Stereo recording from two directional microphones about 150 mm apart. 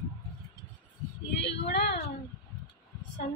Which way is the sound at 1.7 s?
90° left.